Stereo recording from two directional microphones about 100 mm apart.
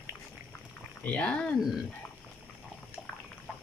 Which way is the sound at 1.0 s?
15° left (ahead or behind).